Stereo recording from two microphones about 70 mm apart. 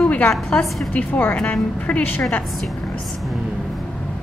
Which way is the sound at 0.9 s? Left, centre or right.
Left.